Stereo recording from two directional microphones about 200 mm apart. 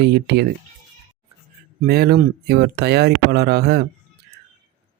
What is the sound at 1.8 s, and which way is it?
Speech, 50° right (ahead or behind).